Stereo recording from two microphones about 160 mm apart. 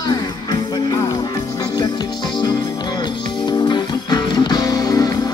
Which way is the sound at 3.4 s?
25° left (ahead or behind).